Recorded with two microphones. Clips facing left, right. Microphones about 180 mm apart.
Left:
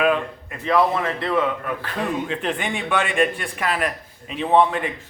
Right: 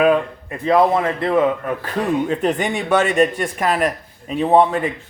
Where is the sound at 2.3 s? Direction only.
40° right (ahead or behind).